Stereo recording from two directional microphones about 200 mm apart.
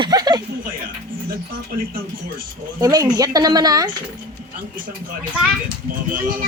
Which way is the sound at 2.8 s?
15° right (ahead or behind).